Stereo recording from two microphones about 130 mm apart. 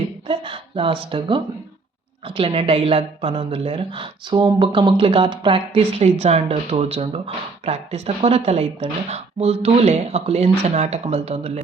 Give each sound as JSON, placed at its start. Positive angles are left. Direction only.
{"t": 0.3, "sound": "speech", "side_deg": -40}
{"t": 6.0, "sound": "speech", "side_deg": -55}